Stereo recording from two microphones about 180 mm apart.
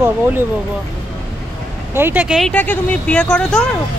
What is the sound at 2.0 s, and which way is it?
Speech, 10° right (ahead or behind).